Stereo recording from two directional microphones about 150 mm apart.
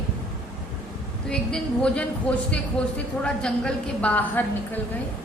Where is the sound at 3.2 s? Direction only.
5° left (ahead or behind).